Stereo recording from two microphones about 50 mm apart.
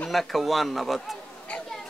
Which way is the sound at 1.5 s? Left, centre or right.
Left.